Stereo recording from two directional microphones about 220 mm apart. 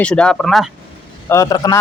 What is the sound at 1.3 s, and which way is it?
Speech, 15° left (ahead or behind).